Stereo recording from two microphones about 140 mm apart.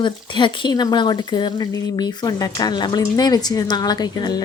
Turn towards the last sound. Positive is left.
turn(degrees=30)  # may be behind; listen again after turning